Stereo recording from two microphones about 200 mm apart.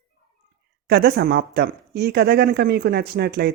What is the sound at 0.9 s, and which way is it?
Speech, 50° right (ahead or behind).